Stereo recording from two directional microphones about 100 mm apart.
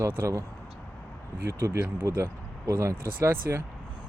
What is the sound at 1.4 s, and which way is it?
Speech, 25° right (ahead or behind).